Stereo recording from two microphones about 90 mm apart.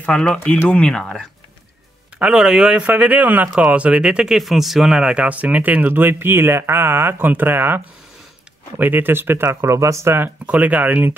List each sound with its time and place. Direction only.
0.0 s speech: 10° left (ahead or behind)
2.1 s speech: 10° right (ahead or behind)